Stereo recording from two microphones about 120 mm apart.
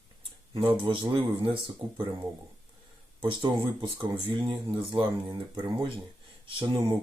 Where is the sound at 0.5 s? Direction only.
45° right (ahead or behind).